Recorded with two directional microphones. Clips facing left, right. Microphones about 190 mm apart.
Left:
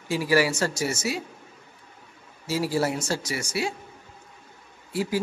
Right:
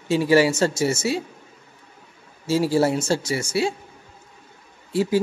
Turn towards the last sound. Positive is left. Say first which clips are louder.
# right 6 dB
turn(degrees=-25)  # may be behind; listen again after turning